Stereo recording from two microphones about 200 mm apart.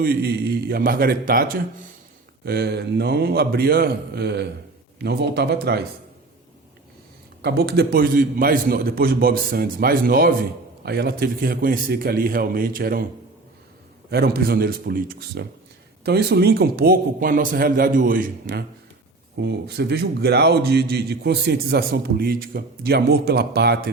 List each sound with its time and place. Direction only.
0.0 s a man's voice: 50° right (ahead or behind)
7.4 s a man's voice: 55° right (ahead or behind)
14.1 s a man's voice: 50° right (ahead or behind)